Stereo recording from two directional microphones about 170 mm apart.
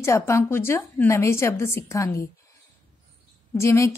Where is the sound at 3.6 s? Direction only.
15° left (ahead or behind).